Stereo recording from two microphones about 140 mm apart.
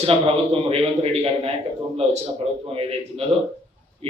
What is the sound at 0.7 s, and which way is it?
Speech, 45° right (ahead or behind).